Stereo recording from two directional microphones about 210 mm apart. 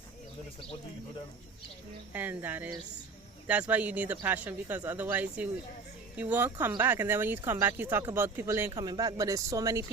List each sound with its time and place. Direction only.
2.1 s speech: 10° right (ahead or behind)